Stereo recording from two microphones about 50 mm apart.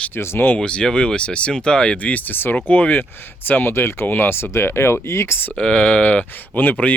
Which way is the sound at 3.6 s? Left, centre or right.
Left.